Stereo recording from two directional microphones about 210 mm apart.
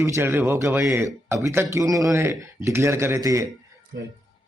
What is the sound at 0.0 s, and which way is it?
Speech, 15° right (ahead or behind).